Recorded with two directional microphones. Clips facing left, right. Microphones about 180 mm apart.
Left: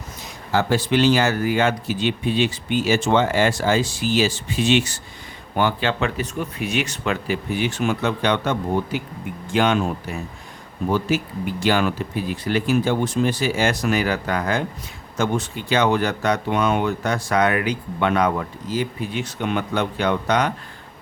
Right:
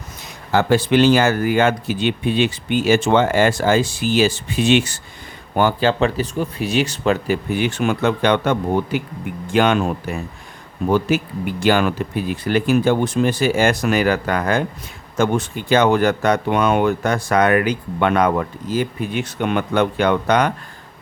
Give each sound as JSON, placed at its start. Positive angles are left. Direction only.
{"t": 0.5, "sound": "speech", "side_deg": -60}
{"t": 5.5, "sound": "speech", "side_deg": -40}
{"t": 7.5, "sound": "speech", "side_deg": -55}
{"t": 11.6, "sound": "speech", "side_deg": -55}